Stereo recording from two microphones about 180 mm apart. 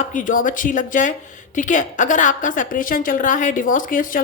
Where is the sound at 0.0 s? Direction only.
45° left (ahead or behind).